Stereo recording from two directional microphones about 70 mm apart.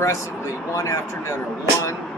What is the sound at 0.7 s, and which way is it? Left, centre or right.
Speech, left.